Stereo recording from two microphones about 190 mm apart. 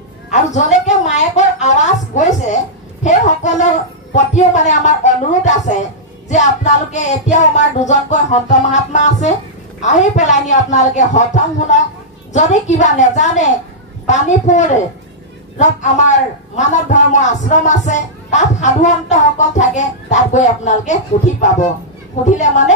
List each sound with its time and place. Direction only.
0.3 s music: 40° left (ahead or behind)
2.1 s a sound: 40° left (ahead or behind)
4.1 s a man's voice: 40° left (ahead or behind)